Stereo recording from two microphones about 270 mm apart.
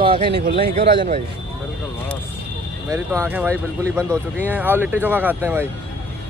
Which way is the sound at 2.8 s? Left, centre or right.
Centre.